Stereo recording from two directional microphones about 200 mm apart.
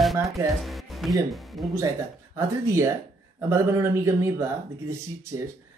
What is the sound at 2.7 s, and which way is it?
A man's voice, 15° right (ahead or behind).